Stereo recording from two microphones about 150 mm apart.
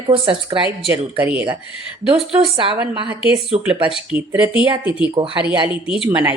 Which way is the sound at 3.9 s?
5° right (ahead or behind).